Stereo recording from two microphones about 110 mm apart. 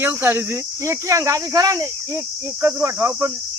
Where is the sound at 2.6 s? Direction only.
20° right (ahead or behind).